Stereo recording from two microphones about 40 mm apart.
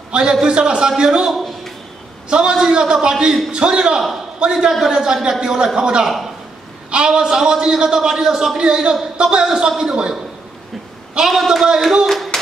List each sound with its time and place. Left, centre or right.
0.1 s a man's voice: right
1.3 s a sound: centre
2.2 s a man's voice: right
6.0 s a man's voice: centre; by 9.4 s right
9.4 s speech: centre
11.2 s speech: centre